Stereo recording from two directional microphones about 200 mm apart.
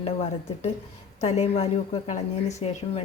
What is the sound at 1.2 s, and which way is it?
A woman's voice, 35° left (ahead or behind).